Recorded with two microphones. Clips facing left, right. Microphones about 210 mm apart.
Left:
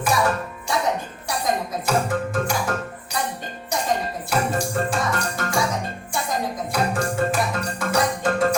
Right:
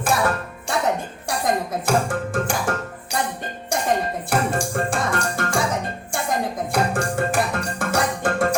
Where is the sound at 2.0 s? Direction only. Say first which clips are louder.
Even; 50° right (ahead or behind).